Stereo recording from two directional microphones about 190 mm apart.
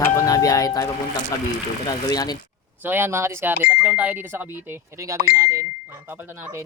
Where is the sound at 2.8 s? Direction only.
10° right (ahead or behind).